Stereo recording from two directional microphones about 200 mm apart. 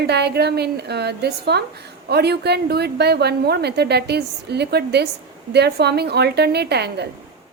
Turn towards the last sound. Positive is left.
turn(degrees=-55)  # may be behind; listen again after turning